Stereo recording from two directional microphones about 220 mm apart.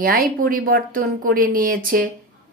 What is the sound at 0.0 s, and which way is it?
A woman's voice, 40° right (ahead or behind).